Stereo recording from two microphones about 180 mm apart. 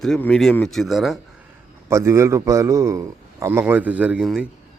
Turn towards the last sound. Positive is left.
turn(degrees=-5)  # may be behind; listen again after turning